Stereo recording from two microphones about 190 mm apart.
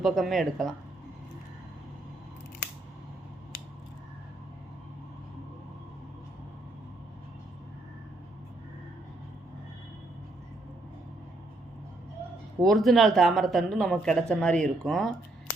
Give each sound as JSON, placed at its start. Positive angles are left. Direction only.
{"t": 0.0, "sound": "speech", "side_deg": 0}
{"t": 12.6, "sound": "speech", "side_deg": 0}